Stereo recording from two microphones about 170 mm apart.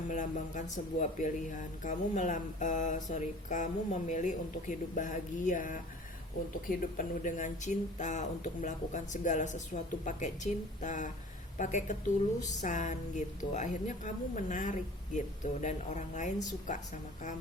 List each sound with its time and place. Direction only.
0.1 s speech: 50° left (ahead or behind)